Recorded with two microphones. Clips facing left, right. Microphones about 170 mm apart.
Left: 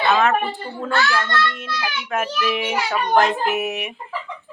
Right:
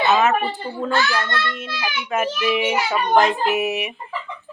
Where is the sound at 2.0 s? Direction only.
Centre (ahead or behind).